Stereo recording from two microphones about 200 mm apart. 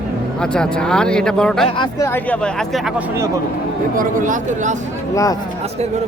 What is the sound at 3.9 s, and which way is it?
Speech, 40° right (ahead or behind).